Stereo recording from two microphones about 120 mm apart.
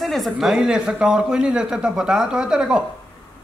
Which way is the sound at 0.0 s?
Centre (ahead or behind).